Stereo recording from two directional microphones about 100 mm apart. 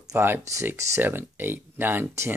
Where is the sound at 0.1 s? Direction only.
25° right (ahead or behind).